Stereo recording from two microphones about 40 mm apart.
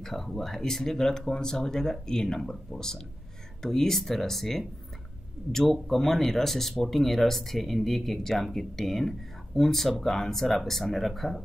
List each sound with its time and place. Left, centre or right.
0.0 s speech: centre